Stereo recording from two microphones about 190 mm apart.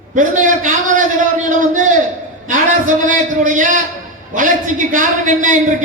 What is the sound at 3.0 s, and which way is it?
A man's voice, 45° right (ahead or behind).